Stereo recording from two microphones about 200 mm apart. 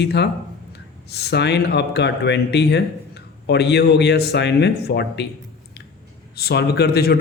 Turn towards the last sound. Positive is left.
turn(degrees=50)  # may be behind; listen again after turning